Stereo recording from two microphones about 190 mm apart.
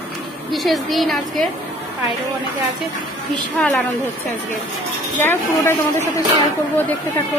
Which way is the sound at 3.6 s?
5° left (ahead or behind).